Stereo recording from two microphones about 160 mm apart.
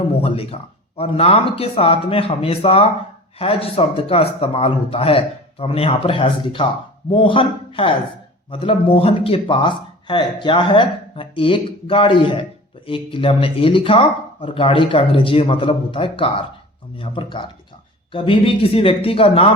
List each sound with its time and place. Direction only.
0.2 s speech: 35° left (ahead or behind)